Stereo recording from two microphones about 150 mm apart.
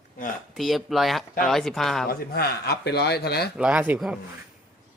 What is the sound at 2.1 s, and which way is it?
Speech, 85° left.